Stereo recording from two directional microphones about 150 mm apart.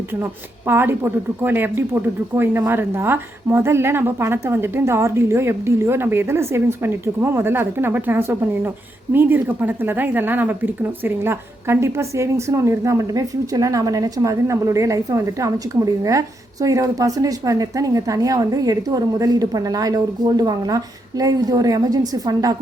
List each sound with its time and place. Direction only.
0.7 s speech: 15° right (ahead or behind)